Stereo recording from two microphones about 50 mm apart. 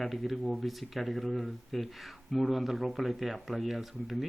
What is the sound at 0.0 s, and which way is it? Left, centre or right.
Speech, centre.